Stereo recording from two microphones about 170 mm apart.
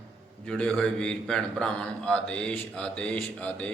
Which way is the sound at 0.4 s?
5° left (ahead or behind).